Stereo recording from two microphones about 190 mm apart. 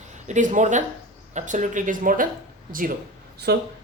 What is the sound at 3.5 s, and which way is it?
Speech, 60° right (ahead or behind).